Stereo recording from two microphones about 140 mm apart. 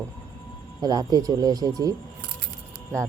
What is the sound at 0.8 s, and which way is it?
Speech, 30° right (ahead or behind).